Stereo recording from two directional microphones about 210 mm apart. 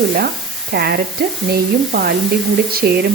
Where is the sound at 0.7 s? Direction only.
50° right (ahead or behind).